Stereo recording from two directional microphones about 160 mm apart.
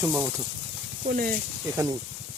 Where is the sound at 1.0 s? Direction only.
60° right (ahead or behind).